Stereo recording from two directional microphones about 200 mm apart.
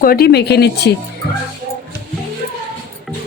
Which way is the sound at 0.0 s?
50° left (ahead or behind).